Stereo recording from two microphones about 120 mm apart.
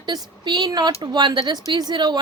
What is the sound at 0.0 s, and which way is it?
Speech, 40° right (ahead or behind).